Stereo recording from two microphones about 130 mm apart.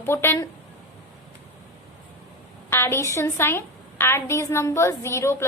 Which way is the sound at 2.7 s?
20° left (ahead or behind).